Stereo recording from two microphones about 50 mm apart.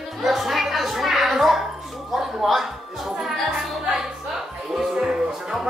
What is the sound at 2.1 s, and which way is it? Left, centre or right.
Music, centre.